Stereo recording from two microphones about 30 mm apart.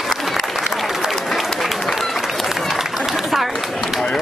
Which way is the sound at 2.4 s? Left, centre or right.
Centre.